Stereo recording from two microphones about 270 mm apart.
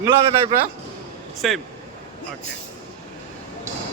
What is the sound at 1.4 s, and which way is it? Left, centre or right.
Speech, centre.